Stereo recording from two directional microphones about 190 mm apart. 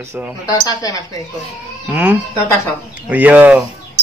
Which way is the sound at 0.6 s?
20° left (ahead or behind).